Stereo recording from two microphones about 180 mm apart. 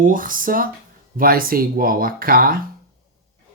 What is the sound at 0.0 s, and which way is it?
Speech, 50° right (ahead or behind).